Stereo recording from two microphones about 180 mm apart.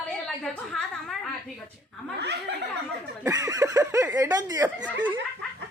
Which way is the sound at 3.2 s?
15° right (ahead or behind).